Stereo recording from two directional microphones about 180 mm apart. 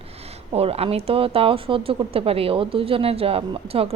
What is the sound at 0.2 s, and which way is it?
Speech, 35° right (ahead or behind).